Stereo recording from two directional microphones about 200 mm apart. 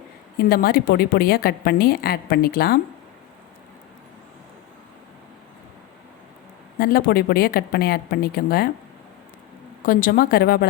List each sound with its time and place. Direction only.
0.3 s a woman's voice: 50° left (ahead or behind)
6.7 s a woman's voice: 45° left (ahead or behind)
9.8 s a woman's voice: 45° left (ahead or behind)